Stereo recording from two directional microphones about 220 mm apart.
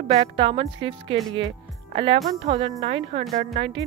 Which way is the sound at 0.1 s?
25° right (ahead or behind).